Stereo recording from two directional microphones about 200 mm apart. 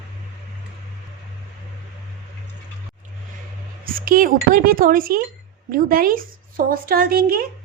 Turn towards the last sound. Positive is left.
turn(degrees=-50)  # may be behind; listen again after turning